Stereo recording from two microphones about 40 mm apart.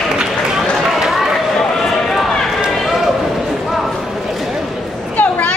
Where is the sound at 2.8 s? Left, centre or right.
Centre.